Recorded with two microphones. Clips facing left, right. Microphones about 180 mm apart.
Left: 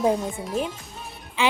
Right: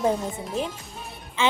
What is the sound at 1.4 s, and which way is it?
Speech, 15° left (ahead or behind).